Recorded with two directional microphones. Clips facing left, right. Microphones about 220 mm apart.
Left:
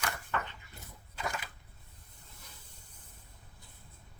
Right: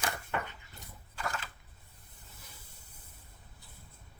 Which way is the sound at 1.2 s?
20° left (ahead or behind).